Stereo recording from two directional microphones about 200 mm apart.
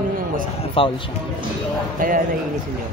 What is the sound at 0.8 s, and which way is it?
Speech, 25° left (ahead or behind).